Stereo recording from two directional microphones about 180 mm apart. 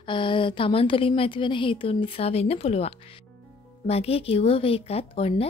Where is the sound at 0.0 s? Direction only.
30° left (ahead or behind).